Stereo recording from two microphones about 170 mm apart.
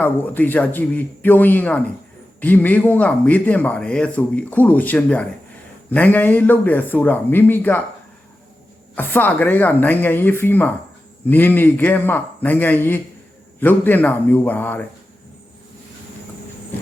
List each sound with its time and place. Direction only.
0.0 s a man's voice: 10° left (ahead or behind)
9.0 s a man's voice: 10° left (ahead or behind)